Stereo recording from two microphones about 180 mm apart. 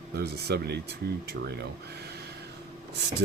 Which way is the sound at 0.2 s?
65° right (ahead or behind).